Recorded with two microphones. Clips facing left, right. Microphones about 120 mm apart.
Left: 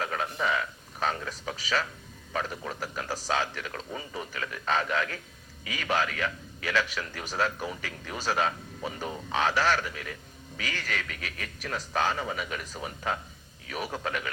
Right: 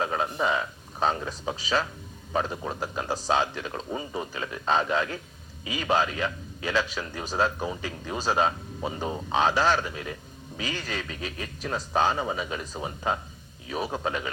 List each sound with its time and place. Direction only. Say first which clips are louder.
0.0 s a man's voice: right 4 dB; 25° right (ahead or behind)